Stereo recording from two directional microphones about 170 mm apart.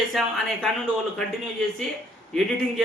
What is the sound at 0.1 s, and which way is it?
Speech, centre (ahead or behind).